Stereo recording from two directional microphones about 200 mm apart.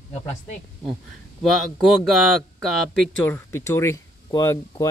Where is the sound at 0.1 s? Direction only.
30° left (ahead or behind).